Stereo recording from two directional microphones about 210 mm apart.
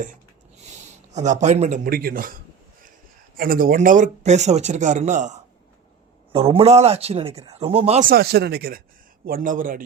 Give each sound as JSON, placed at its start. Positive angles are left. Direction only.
{"t": 1.1, "sound": "speech", "side_deg": -35}
{"t": 8.1, "sound": "speech", "side_deg": -50}